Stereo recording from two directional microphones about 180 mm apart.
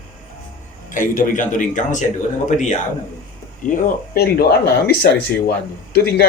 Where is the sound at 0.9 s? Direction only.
45° left (ahead or behind).